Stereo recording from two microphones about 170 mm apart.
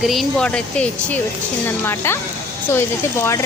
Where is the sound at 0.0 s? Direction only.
Centre (ahead or behind).